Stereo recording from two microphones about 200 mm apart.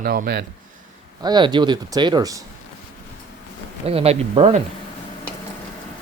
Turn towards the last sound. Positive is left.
turn(degrees=-30)  # may be behind; listen again after turning